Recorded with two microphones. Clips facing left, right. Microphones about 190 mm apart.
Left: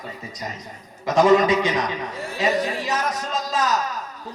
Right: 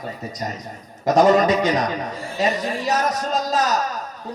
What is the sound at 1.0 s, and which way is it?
A man's voice, 40° right (ahead or behind).